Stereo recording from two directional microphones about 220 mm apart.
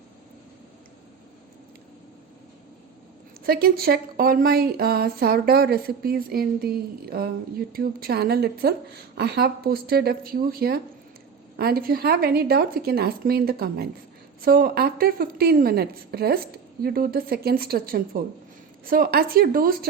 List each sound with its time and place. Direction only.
3.4 s a woman's voice: 45° right (ahead or behind)